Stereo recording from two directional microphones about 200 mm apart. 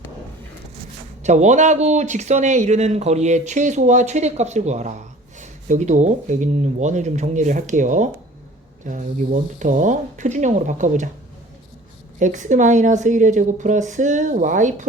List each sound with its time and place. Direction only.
1.2 s speech: 35° right (ahead or behind)
12.2 s speech: 40° right (ahead or behind)